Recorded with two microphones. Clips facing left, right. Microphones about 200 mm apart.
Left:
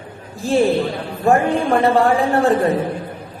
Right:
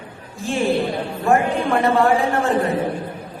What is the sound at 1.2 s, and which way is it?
A man's voice, 35° left (ahead or behind).